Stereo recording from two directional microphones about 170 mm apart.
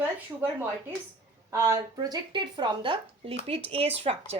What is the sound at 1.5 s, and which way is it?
A woman's voice, 15° right (ahead or behind).